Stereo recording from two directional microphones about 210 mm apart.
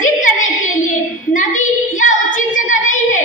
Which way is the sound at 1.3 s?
35° left (ahead or behind).